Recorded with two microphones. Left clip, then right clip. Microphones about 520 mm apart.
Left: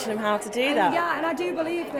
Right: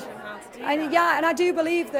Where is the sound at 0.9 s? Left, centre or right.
Right.